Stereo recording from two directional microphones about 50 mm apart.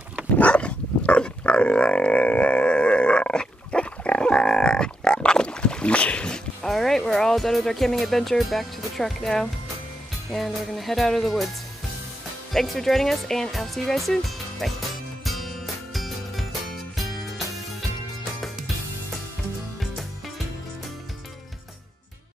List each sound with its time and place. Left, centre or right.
0.4 s grunt: left
6.7 s speech: centre
12.5 s speech: centre
15.2 s music: centre